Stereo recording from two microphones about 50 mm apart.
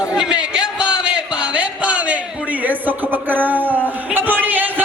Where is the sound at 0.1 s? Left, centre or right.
Centre.